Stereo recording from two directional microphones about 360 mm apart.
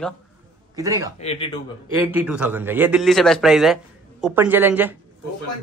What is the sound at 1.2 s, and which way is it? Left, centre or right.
Speech, centre.